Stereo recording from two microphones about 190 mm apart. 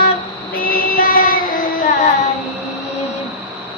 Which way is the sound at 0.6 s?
50° left (ahead or behind).